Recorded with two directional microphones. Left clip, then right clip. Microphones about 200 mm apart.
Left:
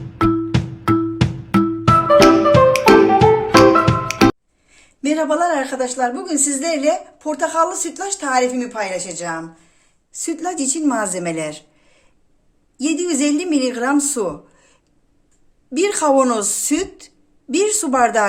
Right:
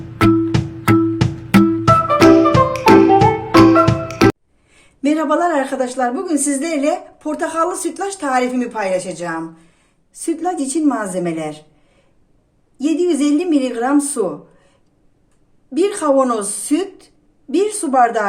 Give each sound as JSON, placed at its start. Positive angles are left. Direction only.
{"t": 0.2, "sound": "music", "side_deg": 0}
{"t": 4.7, "sound": "a woman's voice", "side_deg": 5}
{"t": 10.1, "sound": "speech", "side_deg": 25}
{"t": 12.8, "sound": "speech", "side_deg": 30}
{"t": 15.7, "sound": "a woman's voice", "side_deg": 30}